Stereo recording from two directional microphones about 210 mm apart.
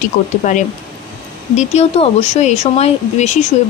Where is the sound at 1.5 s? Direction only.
35° left (ahead or behind).